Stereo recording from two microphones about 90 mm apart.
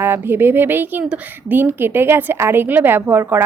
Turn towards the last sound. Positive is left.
turn(degrees=-20)  # may be behind; listen again after turning